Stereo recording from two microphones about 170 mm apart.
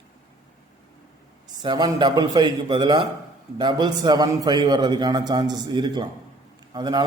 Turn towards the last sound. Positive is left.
turn(degrees=-25)  # may be behind; listen again after turning